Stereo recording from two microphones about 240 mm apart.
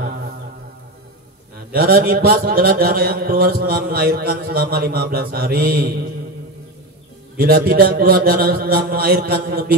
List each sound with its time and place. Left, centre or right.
1.7 s a man's voice: right
7.3 s a man's voice: right